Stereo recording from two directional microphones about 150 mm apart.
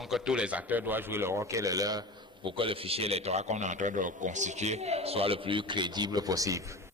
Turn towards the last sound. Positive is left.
turn(degrees=-20)  # may be behind; listen again after turning